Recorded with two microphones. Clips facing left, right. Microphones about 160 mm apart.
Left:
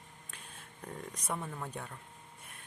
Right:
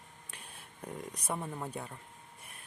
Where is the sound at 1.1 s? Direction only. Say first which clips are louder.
Right 1 dB; 10° right (ahead or behind).